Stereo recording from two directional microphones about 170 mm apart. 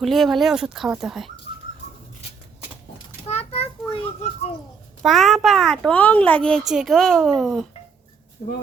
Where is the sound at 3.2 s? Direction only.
35° left (ahead or behind).